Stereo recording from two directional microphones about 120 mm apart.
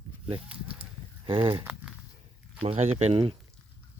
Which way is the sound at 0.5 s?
10° right (ahead or behind).